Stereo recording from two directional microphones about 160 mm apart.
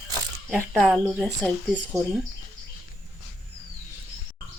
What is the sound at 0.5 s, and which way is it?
Speech, 5° left (ahead or behind).